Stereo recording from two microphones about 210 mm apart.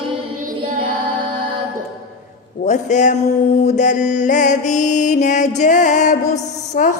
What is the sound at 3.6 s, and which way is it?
Mantra, 35° left (ahead or behind).